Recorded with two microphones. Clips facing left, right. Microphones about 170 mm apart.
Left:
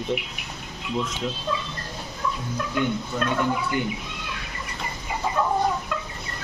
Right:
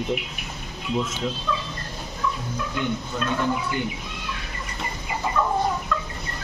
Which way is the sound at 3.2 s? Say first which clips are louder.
Left 1 dB; 50° left (ahead or behind).